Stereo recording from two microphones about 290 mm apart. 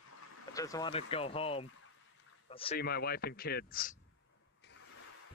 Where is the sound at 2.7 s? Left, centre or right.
Left.